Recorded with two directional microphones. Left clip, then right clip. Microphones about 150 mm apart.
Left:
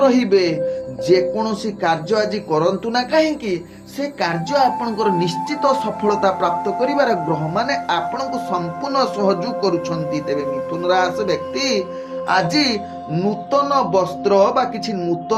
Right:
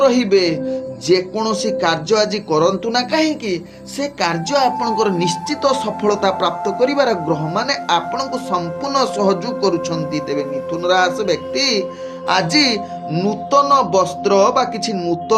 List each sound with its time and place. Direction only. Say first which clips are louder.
0.0 s speech: right 1 dB; 40° right (ahead or behind)